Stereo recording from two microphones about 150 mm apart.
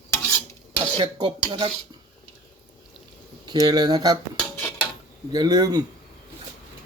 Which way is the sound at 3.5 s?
25° right (ahead or behind).